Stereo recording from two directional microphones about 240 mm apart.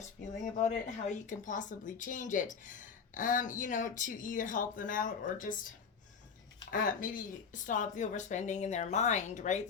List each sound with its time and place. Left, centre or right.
0.9 s speech: left
6.7 s speech: left